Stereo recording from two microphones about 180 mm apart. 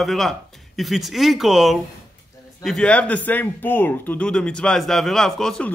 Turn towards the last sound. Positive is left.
turn(degrees=5)  # may be behind; listen again after turning